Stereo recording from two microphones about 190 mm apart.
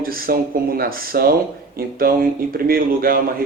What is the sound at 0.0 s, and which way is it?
Speech, 50° right (ahead or behind).